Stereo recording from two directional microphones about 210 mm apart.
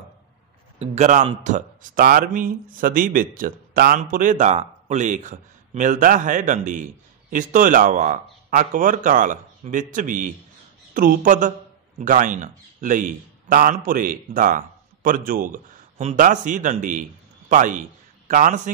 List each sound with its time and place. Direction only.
0.7 s speech: 35° right (ahead or behind)